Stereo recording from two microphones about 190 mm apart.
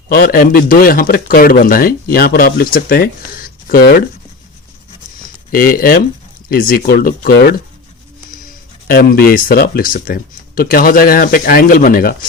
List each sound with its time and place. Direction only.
0.1 s speech: 50° left (ahead or behind)
5.5 s speech: 50° left (ahead or behind)
8.9 s speech: 50° left (ahead or behind)